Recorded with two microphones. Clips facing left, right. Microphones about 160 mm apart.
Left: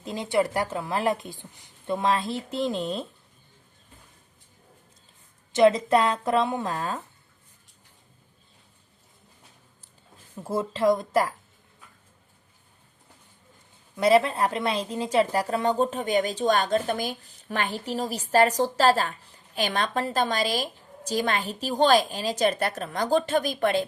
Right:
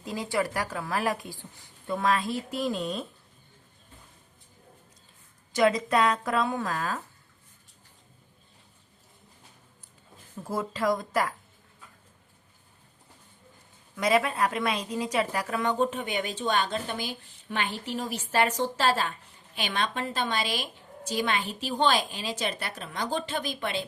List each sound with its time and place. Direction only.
0.0 s speech: 20° left (ahead or behind)
5.5 s speech: 25° left (ahead or behind)
10.4 s speech: 25° left (ahead or behind)
13.9 s a woman's voice: 30° left (ahead or behind); by 23.8 s 50° left (ahead or behind)